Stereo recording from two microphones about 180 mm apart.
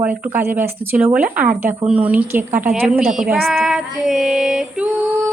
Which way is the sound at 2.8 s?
Centre (ahead or behind).